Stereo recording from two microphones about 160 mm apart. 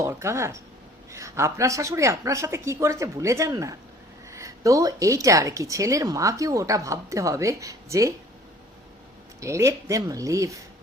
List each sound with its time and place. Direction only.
0.0 s a woman's voice: 15° right (ahead or behind)
9.4 s a woman's voice: 20° right (ahead or behind)